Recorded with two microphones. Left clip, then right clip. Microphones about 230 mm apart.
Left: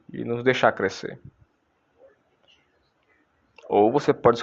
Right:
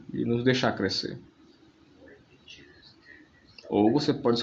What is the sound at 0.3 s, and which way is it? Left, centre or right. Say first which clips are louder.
Speech: left 6 dB; left.